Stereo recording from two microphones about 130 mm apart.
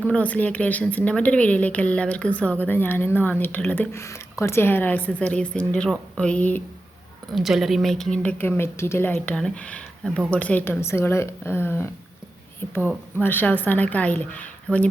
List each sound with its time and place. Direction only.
0.1 s speech: 10° left (ahead or behind)
7.3 s speech: centre (ahead or behind); by 9.1 s 20° left (ahead or behind)
9.2 s speech: 10° left (ahead or behind)
13.1 s speech: 15° left (ahead or behind)